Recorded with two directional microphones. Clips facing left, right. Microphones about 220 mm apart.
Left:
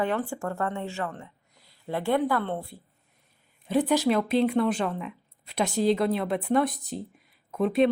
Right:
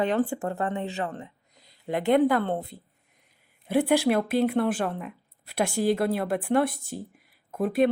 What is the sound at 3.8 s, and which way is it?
Speech, 55° right (ahead or behind).